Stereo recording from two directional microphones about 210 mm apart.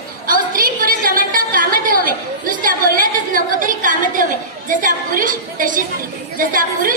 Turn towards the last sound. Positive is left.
turn(degrees=-40)  # may be behind; listen again after turning